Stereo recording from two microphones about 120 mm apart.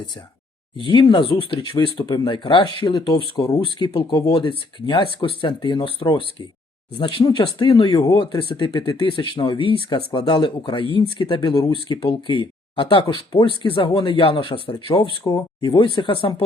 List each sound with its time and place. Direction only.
0.8 s speech: 45° left (ahead or behind)